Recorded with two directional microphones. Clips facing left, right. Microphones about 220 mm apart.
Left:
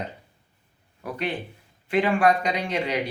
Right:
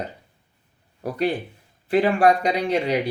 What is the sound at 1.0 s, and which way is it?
Speech, 35° right (ahead or behind).